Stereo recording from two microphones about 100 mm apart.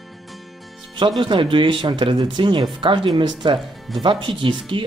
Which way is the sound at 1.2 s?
55° right (ahead or behind).